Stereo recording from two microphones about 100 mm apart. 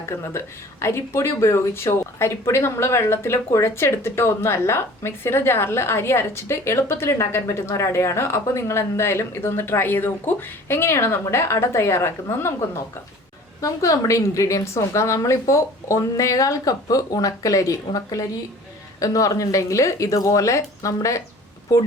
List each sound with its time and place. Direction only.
0.0 s a woman's voice: 25° left (ahead or behind)